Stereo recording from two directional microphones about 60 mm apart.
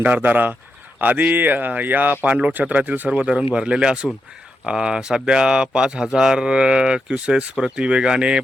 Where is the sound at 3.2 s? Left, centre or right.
Centre.